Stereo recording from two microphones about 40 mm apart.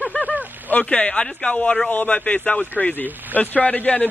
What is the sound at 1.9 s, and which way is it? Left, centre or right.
Speech, left.